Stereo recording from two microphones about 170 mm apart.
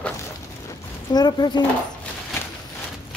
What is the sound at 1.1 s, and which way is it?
Speech, 25° left (ahead or behind).